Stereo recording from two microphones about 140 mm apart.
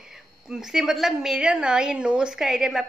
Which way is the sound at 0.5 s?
5° right (ahead or behind).